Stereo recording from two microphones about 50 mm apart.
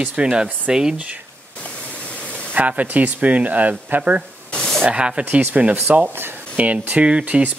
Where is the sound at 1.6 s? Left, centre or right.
Left.